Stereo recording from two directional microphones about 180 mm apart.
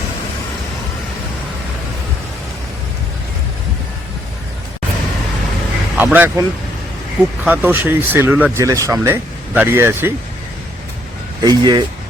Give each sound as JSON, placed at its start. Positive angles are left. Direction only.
{"t": 6.0, "sound": "speech", "side_deg": -10}
{"t": 7.4, "sound": "speech", "side_deg": -10}
{"t": 11.4, "sound": "speech", "side_deg": -25}